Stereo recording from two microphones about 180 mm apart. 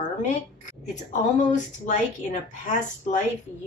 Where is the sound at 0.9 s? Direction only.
40° left (ahead or behind).